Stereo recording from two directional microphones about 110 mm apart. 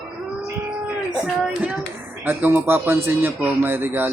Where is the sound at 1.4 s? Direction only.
15° right (ahead or behind).